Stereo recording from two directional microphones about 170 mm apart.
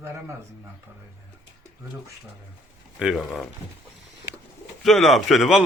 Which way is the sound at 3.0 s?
Centre (ahead or behind).